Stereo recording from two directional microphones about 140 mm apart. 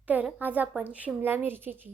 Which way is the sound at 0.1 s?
10° right (ahead or behind).